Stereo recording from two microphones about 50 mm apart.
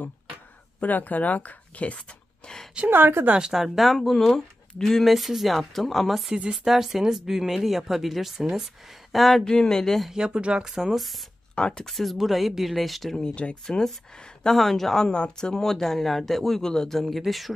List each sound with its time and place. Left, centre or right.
0.7 s speech: left; by 2.6 s centre
2.9 s speech: right
3.3 s speech: centre
3.5 s speech: centre
6.3 s speech: centre
9.4 s a man's voice: centre
10.1 s speech: centre
11.5 s speech: centre
11.8 s speech: centre
13.2 s speech: left
13.7 s a man's voice: centre
14.6 s a man's voice: centre
15.5 s a man's voice: centre
17.0 s speech: centre